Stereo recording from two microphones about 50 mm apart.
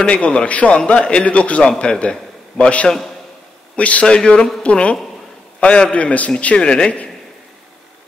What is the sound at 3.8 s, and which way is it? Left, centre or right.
A man's voice, left.